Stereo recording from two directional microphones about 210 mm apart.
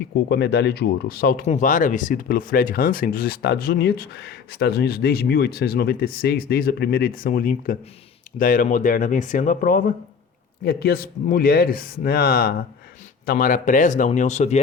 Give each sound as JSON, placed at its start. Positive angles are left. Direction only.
{"t": 0.3, "sound": "speech", "side_deg": 55}